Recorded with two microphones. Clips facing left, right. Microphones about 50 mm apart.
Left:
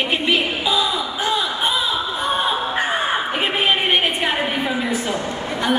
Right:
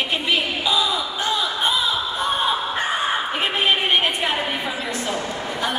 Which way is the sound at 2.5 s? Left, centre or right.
Centre.